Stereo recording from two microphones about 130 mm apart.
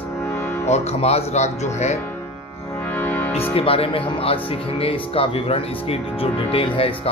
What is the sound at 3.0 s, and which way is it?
Music, 15° left (ahead or behind).